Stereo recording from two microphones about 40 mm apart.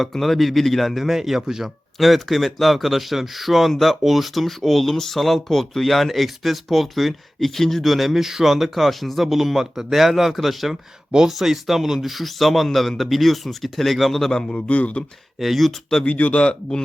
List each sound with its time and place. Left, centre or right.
0.0 s speech: centre
1.6 s speech: centre
14.7 s a man's voice: left
15.4 s speech: centre
16.0 s a man's voice: left